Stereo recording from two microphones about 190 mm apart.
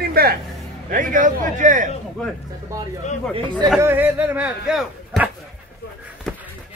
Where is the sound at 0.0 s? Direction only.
50° right (ahead or behind).